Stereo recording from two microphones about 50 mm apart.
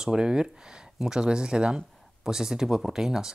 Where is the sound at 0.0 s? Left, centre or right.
Centre.